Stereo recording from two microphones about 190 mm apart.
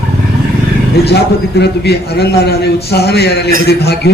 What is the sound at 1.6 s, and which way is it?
Speech, 60° left (ahead or behind).